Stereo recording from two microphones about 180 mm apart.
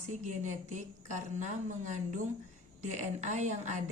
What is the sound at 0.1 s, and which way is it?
A woman's voice, 45° right (ahead or behind).